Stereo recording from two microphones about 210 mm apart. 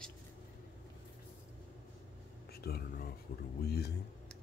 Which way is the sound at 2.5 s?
50° left (ahead or behind).